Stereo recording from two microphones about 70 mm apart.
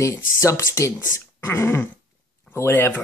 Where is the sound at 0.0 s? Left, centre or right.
Left.